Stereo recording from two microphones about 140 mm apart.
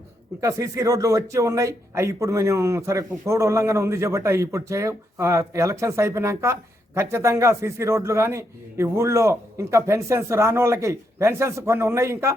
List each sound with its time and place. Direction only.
0.4 s a man's voice: 25° right (ahead or behind)